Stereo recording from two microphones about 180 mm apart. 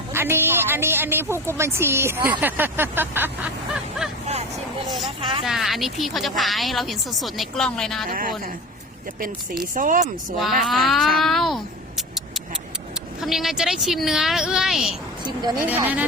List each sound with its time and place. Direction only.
0.1 s speech: 15° right (ahead or behind)
5.5 s a woman's voice: centre (ahead or behind)
9.7 s speech: 45° right (ahead or behind)
10.4 s a woman's voice: centre (ahead or behind)
13.2 s a woman's voice: centre (ahead or behind)